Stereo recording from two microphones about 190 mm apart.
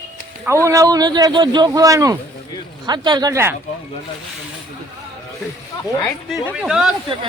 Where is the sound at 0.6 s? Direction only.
15° right (ahead or behind).